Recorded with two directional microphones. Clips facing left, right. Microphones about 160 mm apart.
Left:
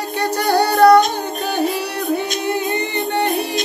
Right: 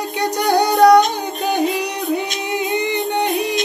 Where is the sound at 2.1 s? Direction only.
15° right (ahead or behind).